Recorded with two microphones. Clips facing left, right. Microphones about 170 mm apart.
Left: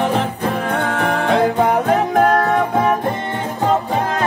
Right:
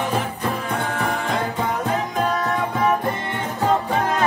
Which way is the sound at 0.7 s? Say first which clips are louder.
Left 5 dB; 65° left (ahead or behind).